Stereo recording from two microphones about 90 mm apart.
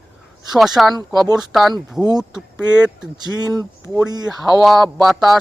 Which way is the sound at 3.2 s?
50° right (ahead or behind).